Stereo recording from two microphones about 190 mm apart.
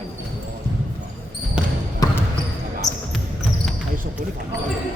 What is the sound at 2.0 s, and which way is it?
Basketball bounce, 20° left (ahead or behind).